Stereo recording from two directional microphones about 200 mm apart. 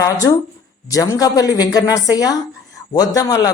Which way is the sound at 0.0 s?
15° left (ahead or behind).